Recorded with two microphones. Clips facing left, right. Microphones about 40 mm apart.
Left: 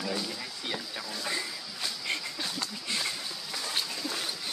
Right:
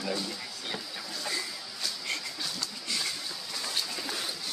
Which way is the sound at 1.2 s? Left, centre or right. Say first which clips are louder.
Even; left.